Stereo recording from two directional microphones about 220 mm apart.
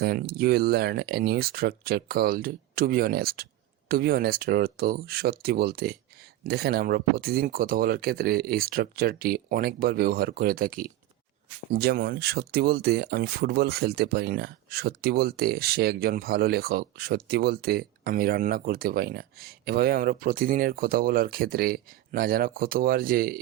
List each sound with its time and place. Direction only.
0.0 s speech: 45° right (ahead or behind)